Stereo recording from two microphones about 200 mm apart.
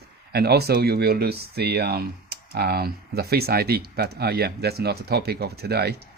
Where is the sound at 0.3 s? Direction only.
55° right (ahead or behind).